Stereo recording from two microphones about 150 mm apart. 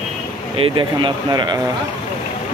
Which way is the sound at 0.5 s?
35° right (ahead or behind).